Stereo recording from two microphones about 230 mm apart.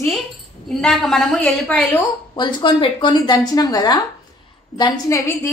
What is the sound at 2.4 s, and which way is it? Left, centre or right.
A woman's voice, centre.